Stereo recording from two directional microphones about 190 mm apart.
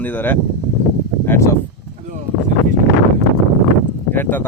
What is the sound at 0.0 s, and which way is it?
Speech, 10° left (ahead or behind).